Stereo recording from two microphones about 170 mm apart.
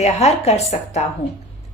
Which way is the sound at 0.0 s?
40° left (ahead or behind).